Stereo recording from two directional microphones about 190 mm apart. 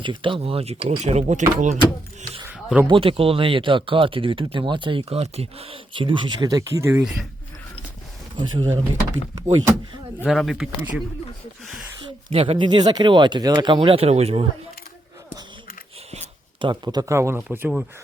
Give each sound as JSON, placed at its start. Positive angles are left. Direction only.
{"t": 0.0, "sound": "speech", "side_deg": -25}
{"t": 2.5, "sound": "a sound", "side_deg": -10}
{"t": 2.8, "sound": "speech", "side_deg": -30}
{"t": 8.5, "sound": "speech", "side_deg": -20}
{"t": 10.2, "sound": "speech", "side_deg": 0}
{"t": 12.3, "sound": "speech", "side_deg": -30}
{"t": 16.1, "sound": "speech", "side_deg": -25}